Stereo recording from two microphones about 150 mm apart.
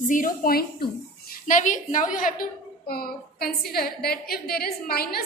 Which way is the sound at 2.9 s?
90° left.